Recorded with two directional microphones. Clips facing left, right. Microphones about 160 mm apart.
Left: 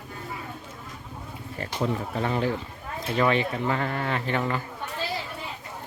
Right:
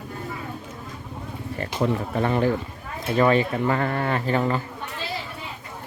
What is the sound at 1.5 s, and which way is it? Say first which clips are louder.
Speech: right 4 dB; 60° right (ahead or behind).